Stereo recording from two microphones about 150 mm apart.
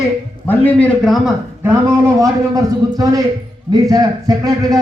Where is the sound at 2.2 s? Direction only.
25° right (ahead or behind).